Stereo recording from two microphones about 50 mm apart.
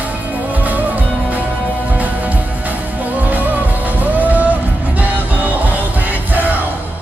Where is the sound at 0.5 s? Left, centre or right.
Right.